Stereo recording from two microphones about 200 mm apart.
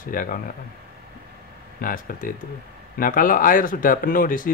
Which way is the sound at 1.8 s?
45° left (ahead or behind).